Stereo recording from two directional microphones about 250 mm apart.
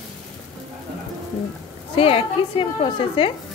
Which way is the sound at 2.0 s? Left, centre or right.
Left.